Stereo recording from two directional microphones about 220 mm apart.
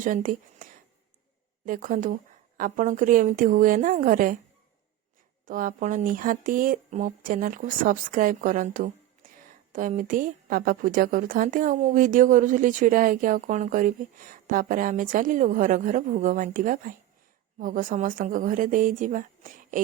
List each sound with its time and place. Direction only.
0.0 s speech: 40° right (ahead or behind)
5.5 s speech: 40° right (ahead or behind)